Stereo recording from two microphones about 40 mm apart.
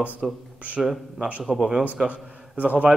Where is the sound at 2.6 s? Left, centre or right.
Right.